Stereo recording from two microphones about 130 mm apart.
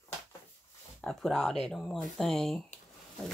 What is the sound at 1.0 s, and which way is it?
Speech, centre (ahead or behind).